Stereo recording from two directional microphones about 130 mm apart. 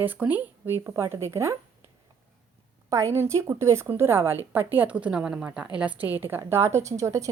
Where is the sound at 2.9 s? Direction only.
20° right (ahead or behind).